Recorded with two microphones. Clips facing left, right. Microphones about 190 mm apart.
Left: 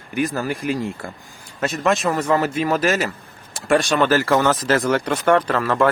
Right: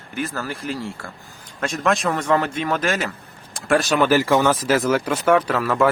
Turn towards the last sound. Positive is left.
turn(degrees=-5)  # may be behind; listen again after turning